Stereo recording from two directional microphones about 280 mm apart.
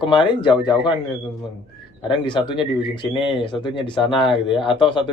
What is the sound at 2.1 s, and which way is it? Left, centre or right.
Speech, centre.